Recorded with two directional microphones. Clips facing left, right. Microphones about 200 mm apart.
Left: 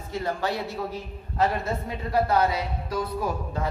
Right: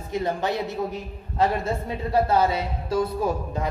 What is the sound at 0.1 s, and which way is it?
Speech, 20° right (ahead or behind).